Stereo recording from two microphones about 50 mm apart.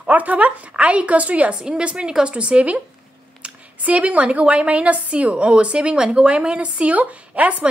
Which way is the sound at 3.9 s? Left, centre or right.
Right.